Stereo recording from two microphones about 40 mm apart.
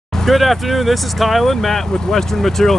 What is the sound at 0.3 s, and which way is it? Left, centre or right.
Speech, centre.